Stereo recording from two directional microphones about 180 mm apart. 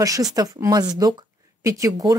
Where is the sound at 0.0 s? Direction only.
20° right (ahead or behind).